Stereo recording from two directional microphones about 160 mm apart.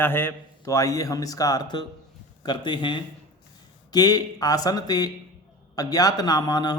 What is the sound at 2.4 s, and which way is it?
A man's voice, 30° left (ahead or behind).